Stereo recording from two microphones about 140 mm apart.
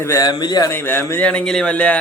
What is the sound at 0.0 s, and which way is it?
Speech, 25° left (ahead or behind).